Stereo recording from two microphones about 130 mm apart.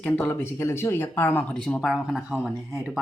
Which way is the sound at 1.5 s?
5° left (ahead or behind).